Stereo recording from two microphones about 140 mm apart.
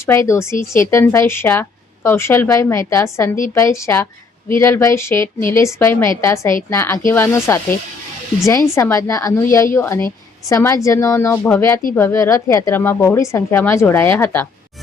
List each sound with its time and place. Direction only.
0.0 s a woman's voice: 20° left (ahead or behind)